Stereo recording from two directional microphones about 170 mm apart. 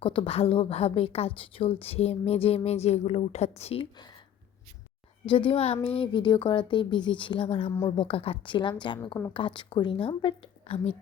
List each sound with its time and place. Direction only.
0.0 s a woman's voice: 30° left (ahead or behind)
5.3 s a woman's voice: 30° left (ahead or behind)